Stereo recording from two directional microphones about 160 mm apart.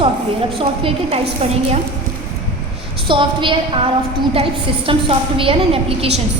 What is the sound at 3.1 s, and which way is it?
Speech, 30° right (ahead or behind).